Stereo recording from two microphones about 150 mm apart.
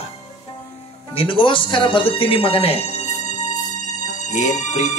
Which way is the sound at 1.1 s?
35° left (ahead or behind).